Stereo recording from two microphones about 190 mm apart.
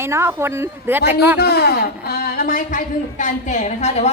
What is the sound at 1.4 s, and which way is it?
A woman's voice, 60° left (ahead or behind).